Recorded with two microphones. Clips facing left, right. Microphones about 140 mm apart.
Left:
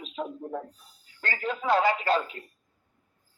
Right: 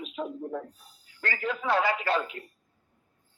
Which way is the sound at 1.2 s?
25° left (ahead or behind).